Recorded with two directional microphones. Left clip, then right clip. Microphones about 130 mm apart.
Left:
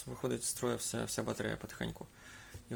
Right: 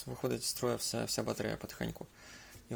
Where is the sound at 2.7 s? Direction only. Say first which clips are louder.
Right 1 dB; 15° right (ahead or behind).